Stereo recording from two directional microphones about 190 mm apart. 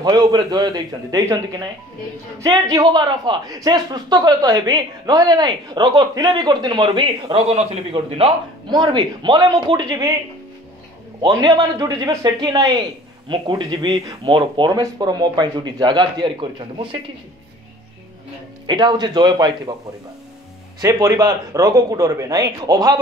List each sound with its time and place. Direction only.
0.0 s speech: 20° right (ahead or behind)
11.1 s a man's voice: 15° right (ahead or behind)
18.7 s speech: 25° right (ahead or behind)
20.8 s speech: 20° right (ahead or behind)